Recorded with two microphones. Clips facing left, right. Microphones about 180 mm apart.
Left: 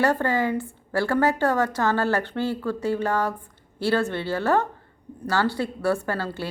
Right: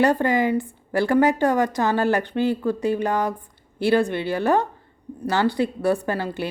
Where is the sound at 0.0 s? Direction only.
15° right (ahead or behind).